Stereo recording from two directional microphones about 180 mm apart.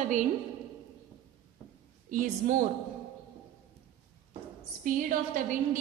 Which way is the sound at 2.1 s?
45° right (ahead or behind).